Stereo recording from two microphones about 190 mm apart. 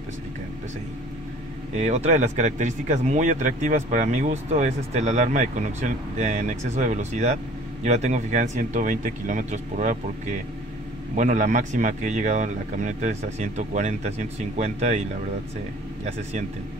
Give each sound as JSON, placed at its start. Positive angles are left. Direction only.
{"t": 1.7, "sound": "speech", "side_deg": -35}